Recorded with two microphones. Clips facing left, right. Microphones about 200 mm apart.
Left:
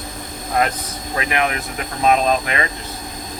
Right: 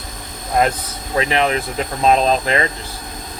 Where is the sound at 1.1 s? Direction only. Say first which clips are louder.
Right 4 dB; 30° right (ahead or behind).